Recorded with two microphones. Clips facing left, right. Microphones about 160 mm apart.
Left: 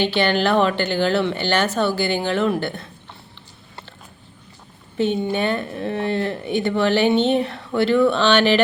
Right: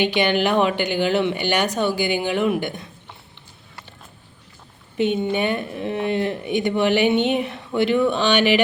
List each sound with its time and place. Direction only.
0.0 s a woman's voice: 15° right (ahead or behind)
4.9 s a woman's voice: 15° right (ahead or behind)